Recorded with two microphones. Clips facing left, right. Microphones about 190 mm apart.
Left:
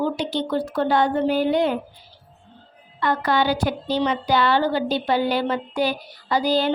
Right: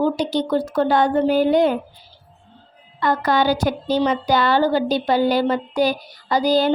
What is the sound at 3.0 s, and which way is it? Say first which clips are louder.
A woman's voice: right 2 dB; 40° right (ahead or behind).